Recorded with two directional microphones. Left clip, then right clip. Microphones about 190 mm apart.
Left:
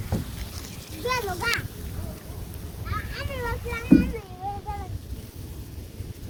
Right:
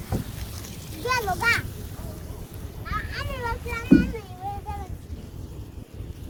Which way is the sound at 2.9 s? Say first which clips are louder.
Right 2 dB; 35° right (ahead or behind).